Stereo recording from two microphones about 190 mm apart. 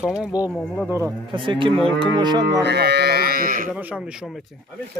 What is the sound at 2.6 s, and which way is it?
Livestock, 60° right (ahead or behind).